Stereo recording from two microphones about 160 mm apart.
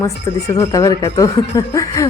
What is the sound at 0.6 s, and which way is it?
Speech, 20° left (ahead or behind).